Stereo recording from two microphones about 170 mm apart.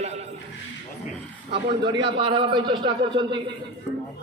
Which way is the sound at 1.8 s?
30° right (ahead or behind).